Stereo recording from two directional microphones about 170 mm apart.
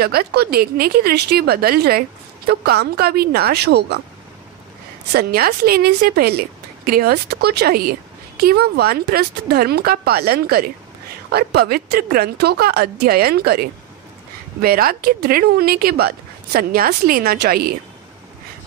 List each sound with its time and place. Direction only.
0.0 s speech: 65° right (ahead or behind)
5.1 s speech: 65° right (ahead or behind)